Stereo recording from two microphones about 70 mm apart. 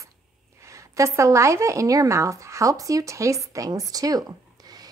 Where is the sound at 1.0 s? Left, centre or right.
Right.